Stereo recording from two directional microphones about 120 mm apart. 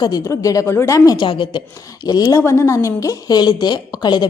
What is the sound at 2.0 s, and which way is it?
A woman's voice, 30° left (ahead or behind).